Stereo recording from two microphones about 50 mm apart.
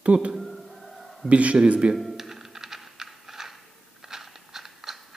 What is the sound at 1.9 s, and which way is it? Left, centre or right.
Typing, centre.